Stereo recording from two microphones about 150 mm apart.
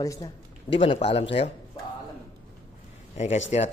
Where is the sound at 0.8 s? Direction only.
35° left (ahead or behind).